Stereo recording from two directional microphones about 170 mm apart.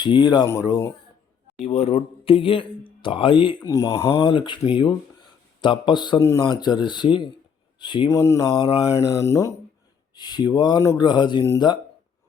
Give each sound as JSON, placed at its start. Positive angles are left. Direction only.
{"t": 0.0, "sound": "speech", "side_deg": 25}
{"t": 1.5, "sound": "speech", "side_deg": 40}
{"t": 3.7, "sound": "speech", "side_deg": 20}
{"t": 4.2, "sound": "speech", "side_deg": 30}
{"t": 8.1, "sound": "speech", "side_deg": 15}